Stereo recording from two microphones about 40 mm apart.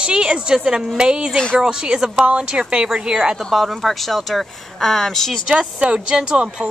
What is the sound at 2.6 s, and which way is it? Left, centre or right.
Speech, right.